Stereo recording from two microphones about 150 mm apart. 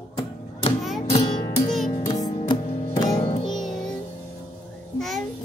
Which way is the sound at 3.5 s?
5° left (ahead or behind).